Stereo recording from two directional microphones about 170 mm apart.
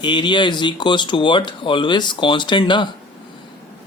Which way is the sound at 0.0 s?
25° left (ahead or behind).